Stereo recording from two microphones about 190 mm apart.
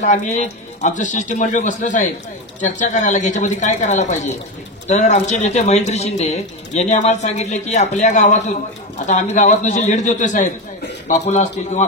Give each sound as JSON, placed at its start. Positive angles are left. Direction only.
{"t": 0.0, "sound": "speech", "side_deg": 40}